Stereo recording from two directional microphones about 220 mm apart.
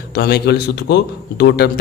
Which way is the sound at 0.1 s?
50° left (ahead or behind).